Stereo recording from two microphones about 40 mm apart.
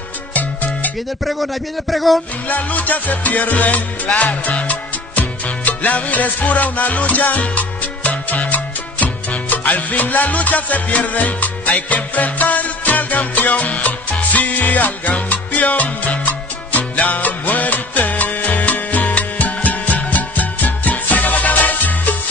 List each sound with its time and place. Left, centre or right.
0.3 s salsa music: left
1.2 s a man's voice: centre
2.4 s music: left